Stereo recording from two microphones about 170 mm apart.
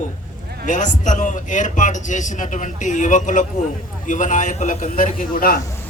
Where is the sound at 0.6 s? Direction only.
50° left (ahead or behind).